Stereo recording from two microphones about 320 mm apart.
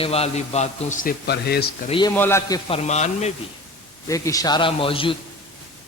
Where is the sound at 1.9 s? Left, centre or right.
Centre.